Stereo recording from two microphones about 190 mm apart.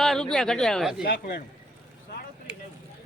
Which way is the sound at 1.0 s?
60° left (ahead or behind).